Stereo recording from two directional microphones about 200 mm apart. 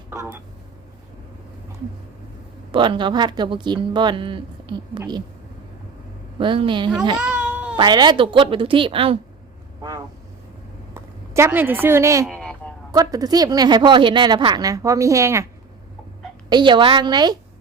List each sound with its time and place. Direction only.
0.1 s speech: 10° right (ahead or behind)
2.7 s speech: 25° right (ahead or behind)
6.4 s speech: 25° right (ahead or behind)
7.2 s a sound: 5° right (ahead or behind)
7.8 s speech: 20° right (ahead or behind)
10.9 s speech: 10° right (ahead or behind)
12.2 s a sound: 5° left (ahead or behind)
12.9 s speech: 20° right (ahead or behind)
16.5 s speech: 20° right (ahead or behind)